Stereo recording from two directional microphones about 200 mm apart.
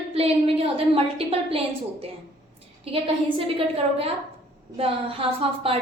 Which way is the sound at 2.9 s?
30° right (ahead or behind).